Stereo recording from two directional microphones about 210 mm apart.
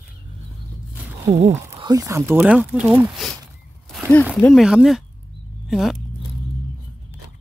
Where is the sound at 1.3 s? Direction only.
30° right (ahead or behind).